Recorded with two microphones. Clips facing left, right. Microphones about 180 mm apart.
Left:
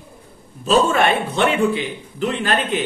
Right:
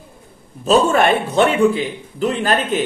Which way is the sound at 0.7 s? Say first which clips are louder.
Right 2 dB; 45° right (ahead or behind).